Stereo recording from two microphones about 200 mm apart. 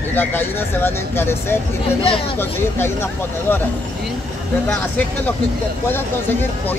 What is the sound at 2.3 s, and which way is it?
Speech, 10° left (ahead or behind).